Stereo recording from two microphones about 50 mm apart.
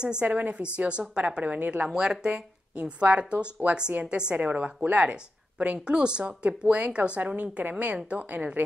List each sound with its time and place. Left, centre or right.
0.0 s speech: centre
0.3 s a woman's voice: right
1.9 s speech: centre